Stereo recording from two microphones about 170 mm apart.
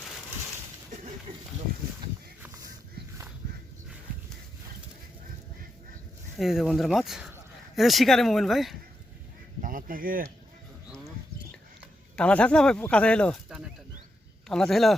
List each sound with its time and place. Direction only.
6.3 s speech: centre (ahead or behind)
9.6 s speech: 55° right (ahead or behind)
12.1 s speech: 5° left (ahead or behind)